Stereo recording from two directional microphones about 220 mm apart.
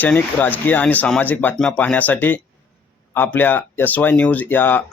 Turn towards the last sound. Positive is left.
turn(degrees=10)  # may be behind; listen again after turning